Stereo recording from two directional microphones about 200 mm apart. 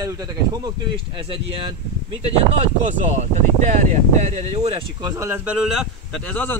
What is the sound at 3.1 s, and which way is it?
A man's voice, 35° right (ahead or behind).